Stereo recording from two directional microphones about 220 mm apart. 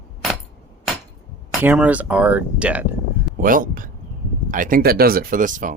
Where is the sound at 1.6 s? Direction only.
5° right (ahead or behind).